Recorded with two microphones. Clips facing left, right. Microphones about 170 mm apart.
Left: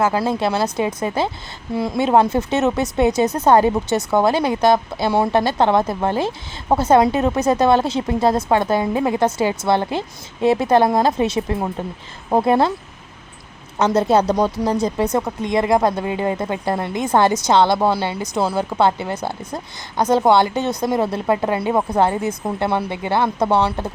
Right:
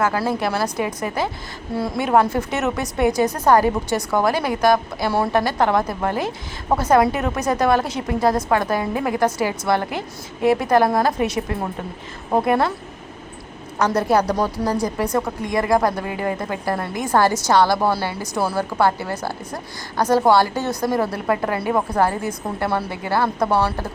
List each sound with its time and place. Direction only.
0.0 s speech: 25° left (ahead or behind)
13.7 s speech: 25° left (ahead or behind)